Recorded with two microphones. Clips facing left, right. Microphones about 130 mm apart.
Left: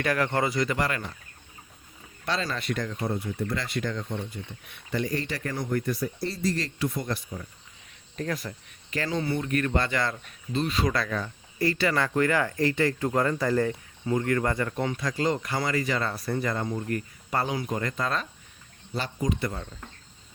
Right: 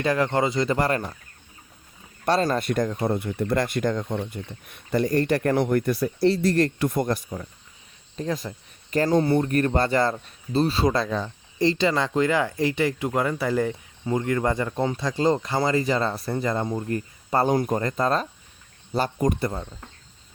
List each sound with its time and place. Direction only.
0.0 s speech: 25° right (ahead or behind)
2.2 s speech: 50° right (ahead or behind)
8.1 s speech: 25° right (ahead or behind)
8.9 s speech: 40° right (ahead or behind); by 17.4 s 25° right (ahead or behind)
17.4 s speech: 45° right (ahead or behind)
18.9 s speech: 50° right (ahead or behind)
19.4 s speech: 30° right (ahead or behind)